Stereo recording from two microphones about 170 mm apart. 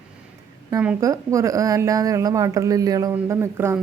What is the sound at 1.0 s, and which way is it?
A woman's voice, 20° right (ahead or behind).